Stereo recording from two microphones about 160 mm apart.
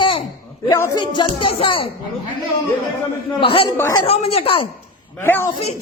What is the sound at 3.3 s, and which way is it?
Speech, 35° left (ahead or behind).